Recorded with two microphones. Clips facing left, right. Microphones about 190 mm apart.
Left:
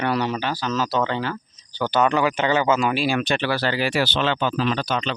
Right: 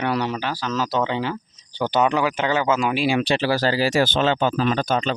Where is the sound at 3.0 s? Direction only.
30° right (ahead or behind).